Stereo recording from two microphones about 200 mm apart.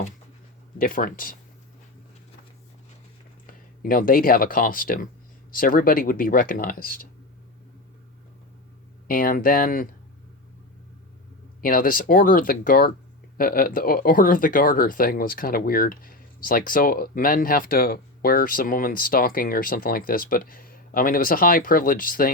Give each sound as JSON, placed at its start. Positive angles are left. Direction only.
{"t": 0.8, "sound": "speech", "side_deg": 45}
{"t": 3.4, "sound": "speech", "side_deg": 45}
{"t": 9.0, "sound": "speech", "side_deg": 45}
{"t": 11.6, "sound": "speech", "side_deg": 45}